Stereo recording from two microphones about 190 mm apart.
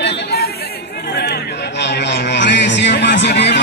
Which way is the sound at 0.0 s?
55° left (ahead or behind).